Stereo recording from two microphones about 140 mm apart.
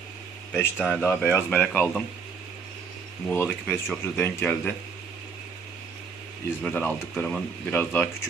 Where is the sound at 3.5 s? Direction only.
Centre (ahead or behind).